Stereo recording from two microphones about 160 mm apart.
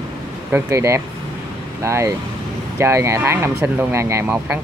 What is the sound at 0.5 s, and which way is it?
Speech, 15° right (ahead or behind).